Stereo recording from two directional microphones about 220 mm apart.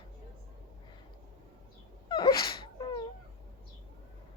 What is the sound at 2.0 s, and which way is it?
Sneeze, 20° left (ahead or behind).